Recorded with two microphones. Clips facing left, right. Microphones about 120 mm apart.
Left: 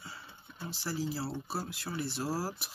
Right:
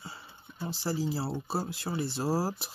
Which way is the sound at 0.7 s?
30° right (ahead or behind).